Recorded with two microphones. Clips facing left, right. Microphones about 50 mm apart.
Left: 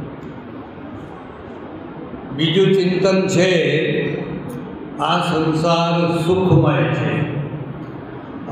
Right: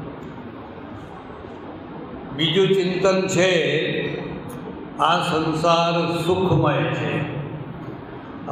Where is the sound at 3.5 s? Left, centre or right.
Left.